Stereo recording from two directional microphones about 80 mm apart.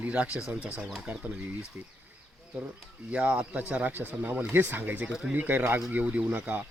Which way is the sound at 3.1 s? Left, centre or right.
Centre.